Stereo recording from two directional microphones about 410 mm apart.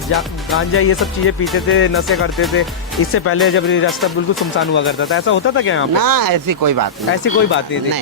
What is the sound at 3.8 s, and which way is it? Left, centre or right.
Speech, centre.